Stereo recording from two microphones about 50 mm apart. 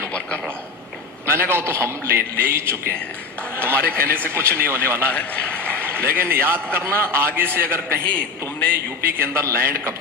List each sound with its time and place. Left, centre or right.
1.3 s a man's voice: right
5.0 s a man's voice: left
5.8 s a man's voice: right
9.0 s a man's voice: right